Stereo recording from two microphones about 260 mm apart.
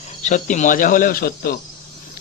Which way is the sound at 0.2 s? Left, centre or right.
Left.